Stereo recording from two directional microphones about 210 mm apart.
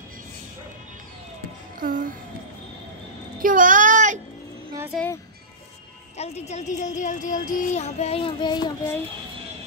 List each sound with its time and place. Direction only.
1.8 s music: 40° right (ahead or behind)
3.4 s child singing: 40° right (ahead or behind)
4.9 s music: 10° left (ahead or behind)
6.1 s speech: 30° left (ahead or behind); by 9.0 s 15° left (ahead or behind)